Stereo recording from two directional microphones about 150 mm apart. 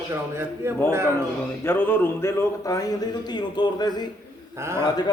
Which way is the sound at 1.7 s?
15° left (ahead or behind).